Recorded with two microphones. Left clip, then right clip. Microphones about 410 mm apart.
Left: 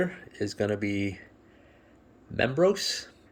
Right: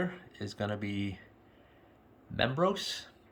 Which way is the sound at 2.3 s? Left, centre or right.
Centre.